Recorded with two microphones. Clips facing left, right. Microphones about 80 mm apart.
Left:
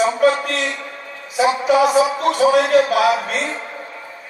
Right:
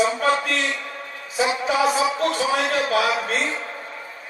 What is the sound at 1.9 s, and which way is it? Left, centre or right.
A man's voice, left.